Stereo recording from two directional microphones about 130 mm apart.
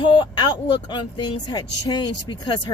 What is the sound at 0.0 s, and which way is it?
Speech, 35° left (ahead or behind).